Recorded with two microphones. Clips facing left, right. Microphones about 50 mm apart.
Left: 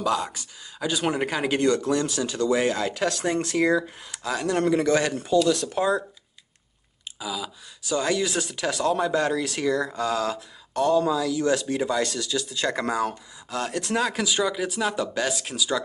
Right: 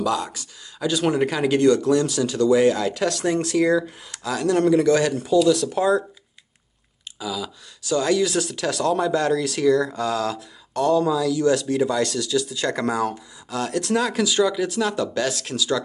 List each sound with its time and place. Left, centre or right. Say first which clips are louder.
0.0 s speech: right 1 dB; left
5.8 s speech: right 4 dB; centre
7.2 s speech: right 3 dB; centre